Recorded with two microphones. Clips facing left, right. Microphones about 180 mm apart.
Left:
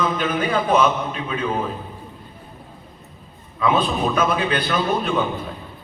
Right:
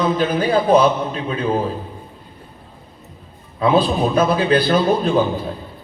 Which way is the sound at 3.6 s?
35° right (ahead or behind).